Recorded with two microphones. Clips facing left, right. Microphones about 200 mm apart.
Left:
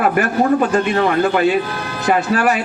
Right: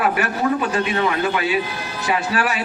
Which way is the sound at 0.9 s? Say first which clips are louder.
Left 5 dB; 50° left (ahead or behind).